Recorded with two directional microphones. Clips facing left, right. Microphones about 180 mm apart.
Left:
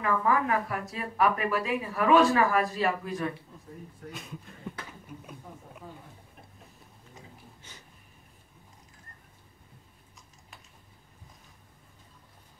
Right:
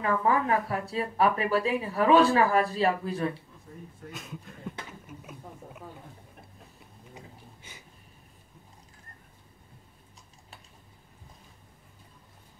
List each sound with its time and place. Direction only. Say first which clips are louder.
0.0 s speech: right 1 dB; 30° right (ahead or behind)
4.1 s speech: right 2 dB; centre (ahead or behind)
5.0 s a sound: even; 5° right (ahead or behind)